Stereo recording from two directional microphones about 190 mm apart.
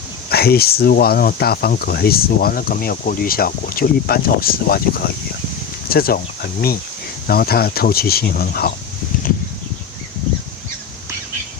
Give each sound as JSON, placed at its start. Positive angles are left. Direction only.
{"t": 0.3, "sound": "speech", "side_deg": 55}